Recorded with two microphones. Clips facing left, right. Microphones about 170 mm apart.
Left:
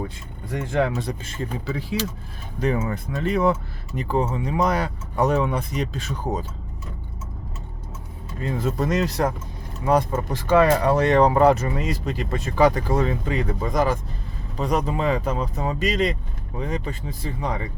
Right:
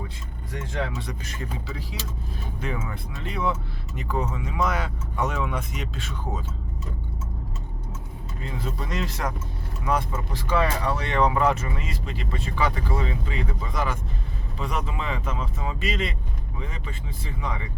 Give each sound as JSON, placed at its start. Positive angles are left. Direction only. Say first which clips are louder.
{"t": 0.5, "sound": "speech", "louder": "left 8 dB", "side_deg": 55}
{"t": 1.0, "sound": "speech", "louder": "left 5 dB", "side_deg": 30}
{"t": 2.6, "sound": "speech", "louder": "left 9 dB", "side_deg": 40}
{"t": 3.9, "sound": "speech", "louder": "left 5 dB", "side_deg": 30}
{"t": 8.4, "sound": "speech", "louder": "left 9 dB", "side_deg": 45}